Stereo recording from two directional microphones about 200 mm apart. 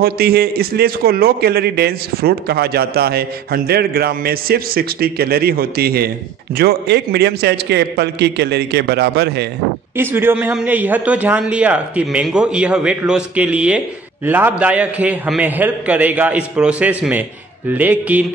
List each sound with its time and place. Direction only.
0.0 s a man's voice: 50° right (ahead or behind)
9.9 s a man's voice: 10° right (ahead or behind)